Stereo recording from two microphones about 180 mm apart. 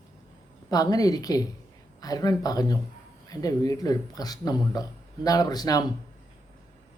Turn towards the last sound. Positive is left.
turn(degrees=20)  # may be behind; listen again after turning